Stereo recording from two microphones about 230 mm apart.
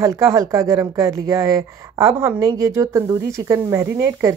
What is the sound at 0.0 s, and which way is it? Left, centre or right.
Speech, centre.